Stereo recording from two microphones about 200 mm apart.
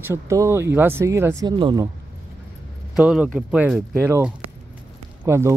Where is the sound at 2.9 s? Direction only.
5° right (ahead or behind).